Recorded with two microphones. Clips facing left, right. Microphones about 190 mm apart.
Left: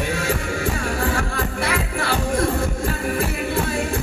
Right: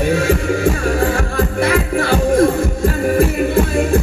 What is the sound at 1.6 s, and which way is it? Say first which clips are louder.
Music: right 8 dB; 45° right (ahead or behind).